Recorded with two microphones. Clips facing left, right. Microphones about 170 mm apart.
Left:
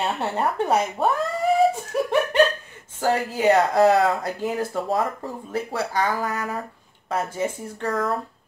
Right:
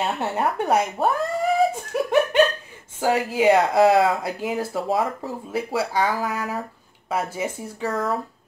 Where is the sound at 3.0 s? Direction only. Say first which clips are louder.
Right 1 dB; 10° right (ahead or behind).